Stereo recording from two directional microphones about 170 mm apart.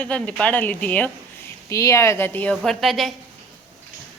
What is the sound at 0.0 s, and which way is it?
A woman's voice, 5° left (ahead or behind).